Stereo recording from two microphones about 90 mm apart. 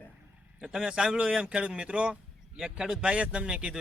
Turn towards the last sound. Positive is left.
turn(degrees=-10)  # may be behind; listen again after turning